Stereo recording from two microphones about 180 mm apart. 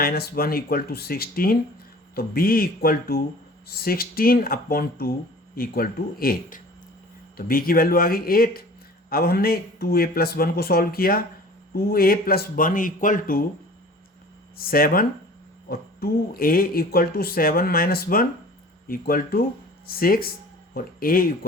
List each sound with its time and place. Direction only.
0.0 s speech: 55° left (ahead or behind)
14.6 s speech: 55° left (ahead or behind)